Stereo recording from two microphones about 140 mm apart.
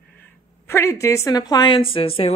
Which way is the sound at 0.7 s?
20° left (ahead or behind).